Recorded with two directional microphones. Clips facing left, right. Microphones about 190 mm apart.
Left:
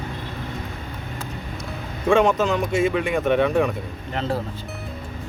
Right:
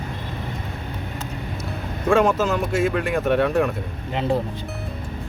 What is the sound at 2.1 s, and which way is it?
Speech, centre (ahead or behind).